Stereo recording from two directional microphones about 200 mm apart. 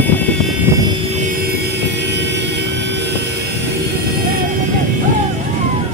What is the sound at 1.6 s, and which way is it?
Vehicle, 55° right (ahead or behind).